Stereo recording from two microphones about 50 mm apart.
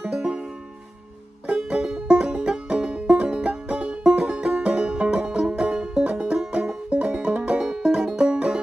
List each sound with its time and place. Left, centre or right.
0.0 s music: centre
1.5 s music: centre